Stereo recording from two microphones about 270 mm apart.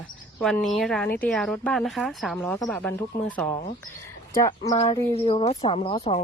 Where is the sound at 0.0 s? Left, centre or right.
Centre.